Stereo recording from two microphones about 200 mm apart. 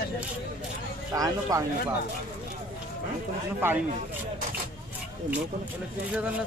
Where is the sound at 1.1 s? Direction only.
15° right (ahead or behind).